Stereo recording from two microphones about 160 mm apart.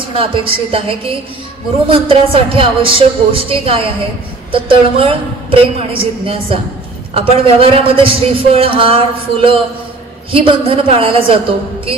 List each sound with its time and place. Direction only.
0.1 s a man's voice: 35° right (ahead or behind)